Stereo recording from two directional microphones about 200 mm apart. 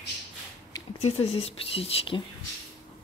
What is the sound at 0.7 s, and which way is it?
Speech, 30° left (ahead or behind).